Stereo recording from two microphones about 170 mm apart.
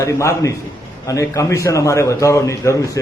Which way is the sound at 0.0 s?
15° left (ahead or behind).